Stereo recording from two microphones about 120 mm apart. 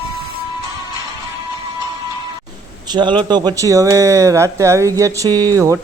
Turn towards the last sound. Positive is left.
turn(degrees=-25)  # may be behind; listen again after turning